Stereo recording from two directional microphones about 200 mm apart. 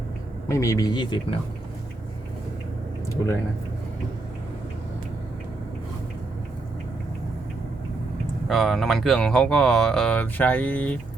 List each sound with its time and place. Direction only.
0.5 s speech: 15° left (ahead or behind)
8.4 s speech: centre (ahead or behind)